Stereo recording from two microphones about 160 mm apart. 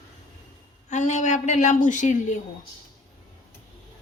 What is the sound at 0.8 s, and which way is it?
A woman's voice, 45° left (ahead or behind).